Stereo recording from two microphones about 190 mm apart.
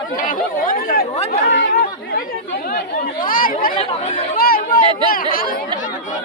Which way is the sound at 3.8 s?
30° left (ahead or behind).